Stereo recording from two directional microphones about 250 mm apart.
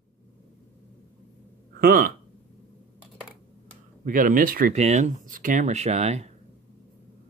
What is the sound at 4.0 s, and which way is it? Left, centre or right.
Speech, right.